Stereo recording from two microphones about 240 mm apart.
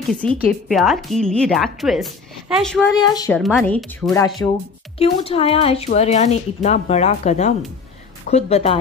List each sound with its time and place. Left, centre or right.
0.1 s speech: centre
3.0 s speech: centre
3.3 s speech: centre
4.9 s speech: left